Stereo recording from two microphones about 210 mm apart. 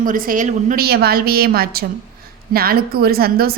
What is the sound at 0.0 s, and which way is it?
Speech, 40° right (ahead or behind).